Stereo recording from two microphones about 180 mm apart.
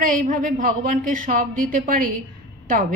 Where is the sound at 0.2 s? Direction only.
50° right (ahead or behind).